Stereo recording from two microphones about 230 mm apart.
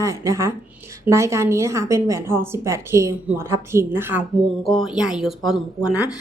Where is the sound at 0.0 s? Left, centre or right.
Centre.